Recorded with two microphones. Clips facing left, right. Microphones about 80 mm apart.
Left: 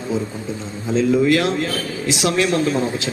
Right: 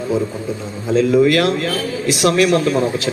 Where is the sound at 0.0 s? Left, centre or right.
Right.